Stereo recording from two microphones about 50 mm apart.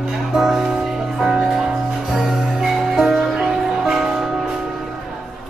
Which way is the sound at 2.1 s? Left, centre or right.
Centre.